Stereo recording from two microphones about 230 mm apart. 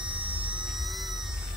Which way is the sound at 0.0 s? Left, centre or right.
Right.